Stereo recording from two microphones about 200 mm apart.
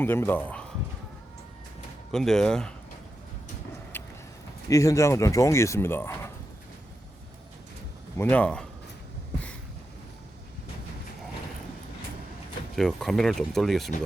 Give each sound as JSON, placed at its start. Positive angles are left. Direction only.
{"t": 0.0, "sound": "speech", "side_deg": 10}
{"t": 2.1, "sound": "speech", "side_deg": 0}
{"t": 3.9, "sound": "vehicle", "side_deg": 10}
{"t": 4.7, "sound": "speech", "side_deg": 15}
{"t": 8.2, "sound": "speech", "side_deg": 5}
{"t": 12.7, "sound": "speech", "side_deg": 0}